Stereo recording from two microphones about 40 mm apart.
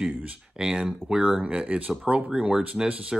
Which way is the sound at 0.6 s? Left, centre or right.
Centre.